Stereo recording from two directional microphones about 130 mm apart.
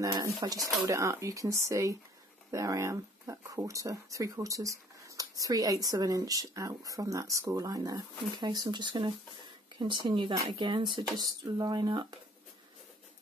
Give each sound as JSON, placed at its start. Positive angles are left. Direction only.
{"t": 0.0, "sound": "speech", "side_deg": -30}